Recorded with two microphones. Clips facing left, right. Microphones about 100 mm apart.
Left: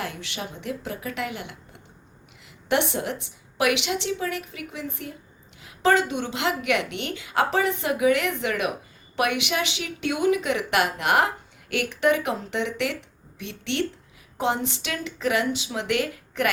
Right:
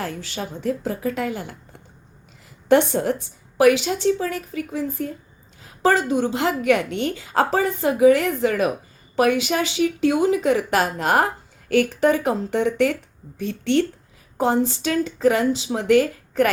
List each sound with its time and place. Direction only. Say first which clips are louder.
0.0 s a woman's voice: right 4 dB; 35° right (ahead or behind)
2.6 s a woman's voice: right 7 dB; 40° right (ahead or behind)